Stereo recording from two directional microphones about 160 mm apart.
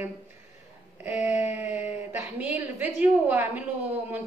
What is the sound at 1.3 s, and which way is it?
Speech, 15° right (ahead or behind).